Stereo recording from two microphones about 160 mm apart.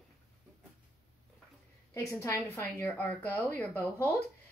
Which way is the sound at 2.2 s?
15° left (ahead or behind).